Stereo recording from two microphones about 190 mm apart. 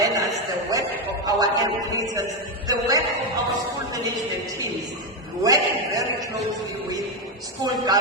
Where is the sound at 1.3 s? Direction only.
20° right (ahead or behind).